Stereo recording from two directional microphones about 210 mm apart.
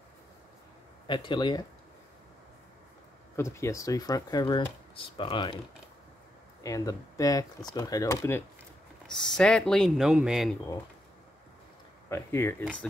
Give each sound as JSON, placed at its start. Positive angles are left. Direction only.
{"t": 1.0, "sound": "speech", "side_deg": 20}
{"t": 3.3, "sound": "speech", "side_deg": 15}
{"t": 6.6, "sound": "speech", "side_deg": 15}
{"t": 9.0, "sound": "speech", "side_deg": 5}
{"t": 12.1, "sound": "speech", "side_deg": 10}